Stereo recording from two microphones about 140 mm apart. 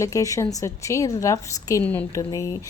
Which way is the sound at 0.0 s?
25° left (ahead or behind).